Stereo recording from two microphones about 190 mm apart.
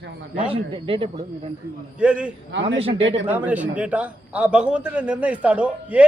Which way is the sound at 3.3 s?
10° right (ahead or behind).